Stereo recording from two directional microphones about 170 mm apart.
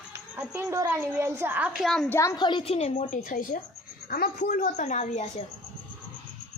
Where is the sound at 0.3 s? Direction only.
15° right (ahead or behind).